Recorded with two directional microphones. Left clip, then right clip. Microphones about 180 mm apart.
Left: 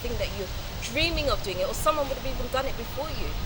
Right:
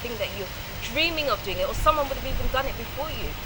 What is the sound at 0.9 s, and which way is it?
Speech, 20° left (ahead or behind).